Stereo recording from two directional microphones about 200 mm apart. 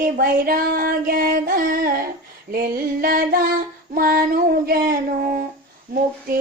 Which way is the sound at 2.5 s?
45° right (ahead or behind).